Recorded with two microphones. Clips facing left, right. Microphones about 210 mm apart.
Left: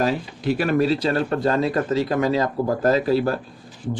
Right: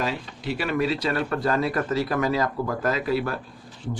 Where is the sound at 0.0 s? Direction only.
45° left (ahead or behind).